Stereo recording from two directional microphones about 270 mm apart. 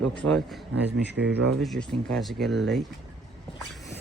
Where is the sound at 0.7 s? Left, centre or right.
Right.